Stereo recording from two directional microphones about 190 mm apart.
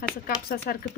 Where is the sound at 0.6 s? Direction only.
50° left (ahead or behind).